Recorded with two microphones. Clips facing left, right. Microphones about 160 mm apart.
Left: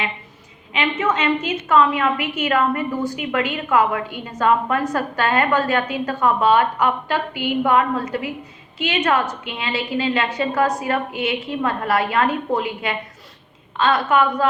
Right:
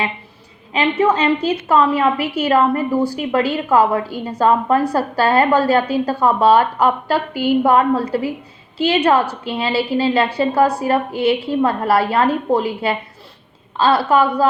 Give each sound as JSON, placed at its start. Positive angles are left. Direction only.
{"t": 0.7, "sound": "a woman's voice", "side_deg": -35}